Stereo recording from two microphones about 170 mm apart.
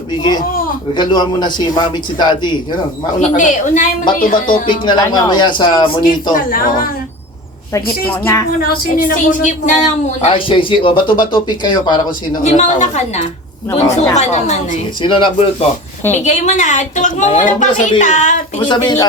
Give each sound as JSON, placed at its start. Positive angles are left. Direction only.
{"t": 0.2, "sound": "speech", "side_deg": 25}
{"t": 3.2, "sound": "a woman's voice", "side_deg": 45}
{"t": 4.6, "sound": "speech", "side_deg": 30}
{"t": 6.3, "sound": "a woman's voice", "side_deg": 55}
{"t": 7.7, "sound": "a woman's voice", "side_deg": 15}
{"t": 8.6, "sound": "a woman's voice", "side_deg": 60}
{"t": 12.4, "sound": "a woman's voice", "side_deg": 40}
{"t": 15.0, "sound": "speech", "side_deg": 30}
{"t": 16.1, "sound": "speech", "side_deg": 45}
{"t": 18.6, "sound": "speech", "side_deg": 25}